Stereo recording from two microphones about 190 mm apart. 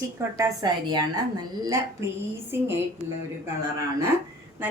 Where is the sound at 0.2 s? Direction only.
15° right (ahead or behind).